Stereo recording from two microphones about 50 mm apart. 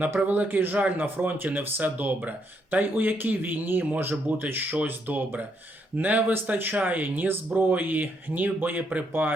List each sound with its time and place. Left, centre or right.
0.2 s speech: right
0.4 s speech: right